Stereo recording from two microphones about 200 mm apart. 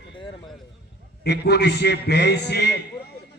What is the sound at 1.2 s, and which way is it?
A man's voice, 55° left (ahead or behind).